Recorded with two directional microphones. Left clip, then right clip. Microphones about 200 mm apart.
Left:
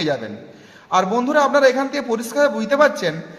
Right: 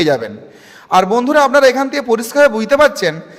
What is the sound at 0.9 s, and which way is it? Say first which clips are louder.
A man's voice: right 6 dB; 40° right (ahead or behind).